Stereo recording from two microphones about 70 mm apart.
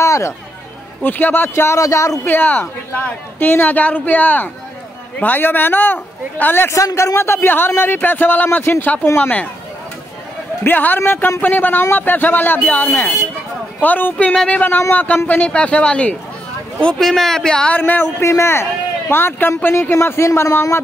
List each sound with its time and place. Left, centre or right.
0.0 s chatter: left
1.0 s a woman's voice: left
1.5 s speech: left
2.2 s a woman's voice: left
6.7 s speech: left
7.2 s a man's voice: left
10.6 s a woman's voice: left
13.7 s a woman's voice: left
14.1 s speech: centre
17.0 s speech: centre
17.7 s a woman's voice: left
18.2 s a man's voice: left